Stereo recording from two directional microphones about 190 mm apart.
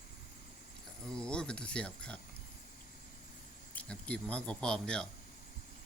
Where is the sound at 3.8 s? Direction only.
5° left (ahead or behind).